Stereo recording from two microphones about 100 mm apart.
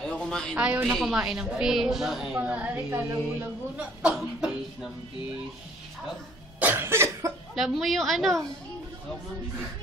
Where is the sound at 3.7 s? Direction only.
5° right (ahead or behind).